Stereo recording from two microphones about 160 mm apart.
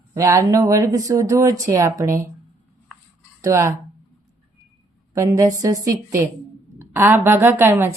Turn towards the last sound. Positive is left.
turn(degrees=-15)  # may be behind; listen again after turning